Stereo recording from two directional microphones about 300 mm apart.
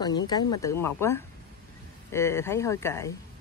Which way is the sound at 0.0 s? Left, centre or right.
Centre.